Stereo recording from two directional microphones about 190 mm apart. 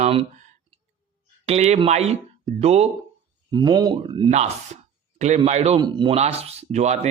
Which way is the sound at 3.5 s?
20° right (ahead or behind).